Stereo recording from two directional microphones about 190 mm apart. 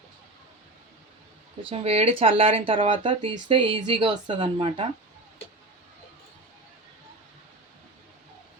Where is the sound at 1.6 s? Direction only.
30° right (ahead or behind).